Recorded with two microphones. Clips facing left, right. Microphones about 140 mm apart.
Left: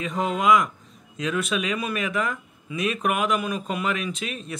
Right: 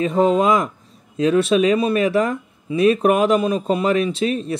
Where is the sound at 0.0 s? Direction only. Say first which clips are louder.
Right 8 dB; 35° right (ahead or behind).